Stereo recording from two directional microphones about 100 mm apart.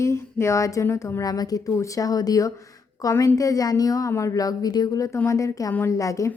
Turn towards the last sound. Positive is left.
turn(degrees=35)  # may be behind; listen again after turning